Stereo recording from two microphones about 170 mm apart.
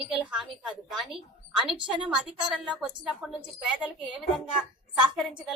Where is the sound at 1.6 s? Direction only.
30° right (ahead or behind).